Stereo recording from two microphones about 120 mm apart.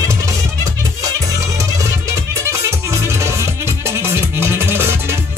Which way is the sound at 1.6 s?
25° right (ahead or behind).